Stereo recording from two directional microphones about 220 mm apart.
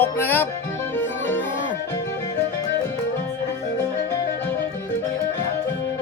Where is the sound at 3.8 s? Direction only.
10° left (ahead or behind).